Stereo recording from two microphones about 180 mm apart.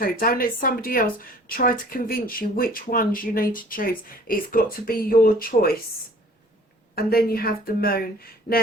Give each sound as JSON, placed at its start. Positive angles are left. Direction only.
{"t": 0.0, "sound": "speech", "side_deg": 50}
{"t": 6.9, "sound": "speech", "side_deg": 55}